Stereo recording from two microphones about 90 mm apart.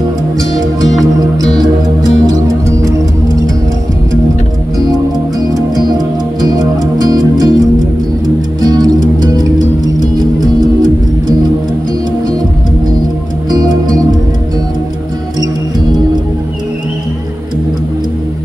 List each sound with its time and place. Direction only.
0.6 s music: 45° right (ahead or behind)
5.5 s music: 50° right (ahead or behind)
8.6 s music: 45° right (ahead or behind)
13.5 s music: 45° right (ahead or behind)